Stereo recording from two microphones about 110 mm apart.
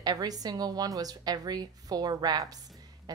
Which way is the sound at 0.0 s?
35° right (ahead or behind).